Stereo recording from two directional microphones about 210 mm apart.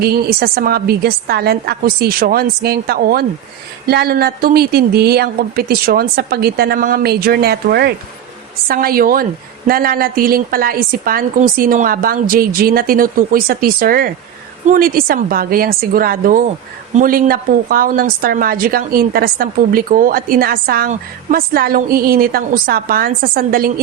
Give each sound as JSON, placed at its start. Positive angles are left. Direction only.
{"t": 0.0, "sound": "a woman's voice", "side_deg": -45}